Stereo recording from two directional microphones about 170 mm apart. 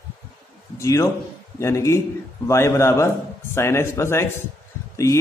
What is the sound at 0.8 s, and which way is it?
A man's voice, 20° left (ahead or behind).